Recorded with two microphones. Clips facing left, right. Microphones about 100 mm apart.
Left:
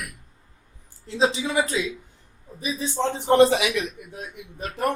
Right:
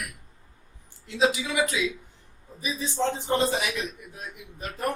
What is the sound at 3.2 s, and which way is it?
Speech, 75° left (ahead or behind).